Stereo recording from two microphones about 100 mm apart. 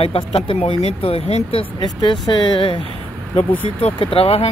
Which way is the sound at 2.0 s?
45° left (ahead or behind).